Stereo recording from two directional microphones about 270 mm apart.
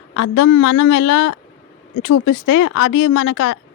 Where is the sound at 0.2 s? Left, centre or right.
Left.